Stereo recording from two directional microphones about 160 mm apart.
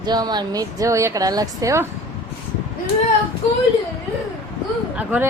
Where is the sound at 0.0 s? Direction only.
25° right (ahead or behind).